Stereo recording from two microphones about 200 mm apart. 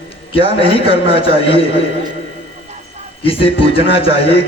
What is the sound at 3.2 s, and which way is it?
A man's voice, 25° left (ahead or behind).